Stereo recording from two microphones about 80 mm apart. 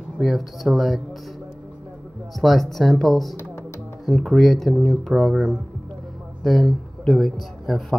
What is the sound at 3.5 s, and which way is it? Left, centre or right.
Music, left.